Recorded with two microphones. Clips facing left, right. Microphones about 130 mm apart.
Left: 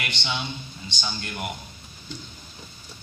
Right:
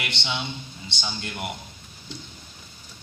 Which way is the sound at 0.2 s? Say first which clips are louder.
Even; 20° right (ahead or behind).